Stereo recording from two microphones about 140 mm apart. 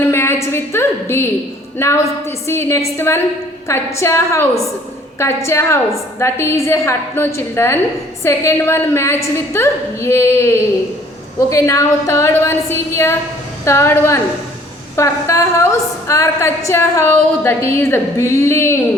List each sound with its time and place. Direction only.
0.1 s a woman's voice: 20° left (ahead or behind)